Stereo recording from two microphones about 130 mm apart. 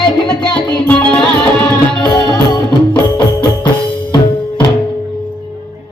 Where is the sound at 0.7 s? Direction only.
10° left (ahead or behind).